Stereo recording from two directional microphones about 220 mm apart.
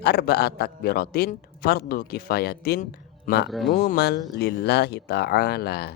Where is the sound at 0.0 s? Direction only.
45° left (ahead or behind).